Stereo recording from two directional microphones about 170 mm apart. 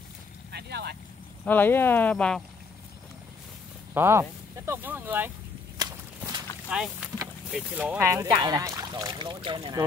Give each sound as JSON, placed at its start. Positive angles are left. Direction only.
{"t": 0.5, "sound": "vehicle", "side_deg": -75}
{"t": 1.4, "sound": "speech", "side_deg": 10}
{"t": 3.9, "sound": "speech", "side_deg": -15}
{"t": 5.8, "sound": "walk", "side_deg": -25}
{"t": 6.7, "sound": "speech", "side_deg": -5}
{"t": 8.1, "sound": "speech", "side_deg": -20}